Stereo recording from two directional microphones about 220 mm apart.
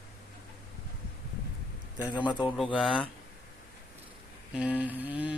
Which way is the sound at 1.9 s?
15° left (ahead or behind).